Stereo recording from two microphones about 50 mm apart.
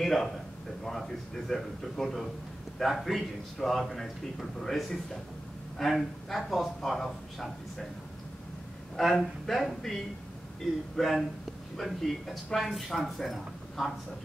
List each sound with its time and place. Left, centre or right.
0.0 s a man's voice: centre
8.9 s a man's voice: centre
11.0 s a man's voice: centre